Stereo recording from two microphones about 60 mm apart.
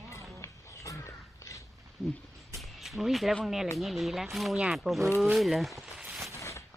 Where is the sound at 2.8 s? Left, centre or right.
Centre.